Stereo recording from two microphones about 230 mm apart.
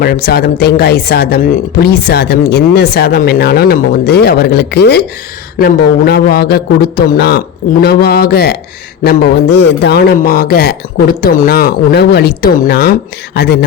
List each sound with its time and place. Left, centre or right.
0.0 s a woman's voice: left